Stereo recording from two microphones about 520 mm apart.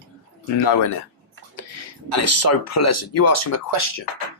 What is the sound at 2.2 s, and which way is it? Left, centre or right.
Speech, left.